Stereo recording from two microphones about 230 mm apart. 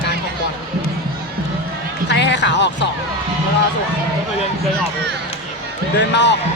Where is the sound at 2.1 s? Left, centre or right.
Left.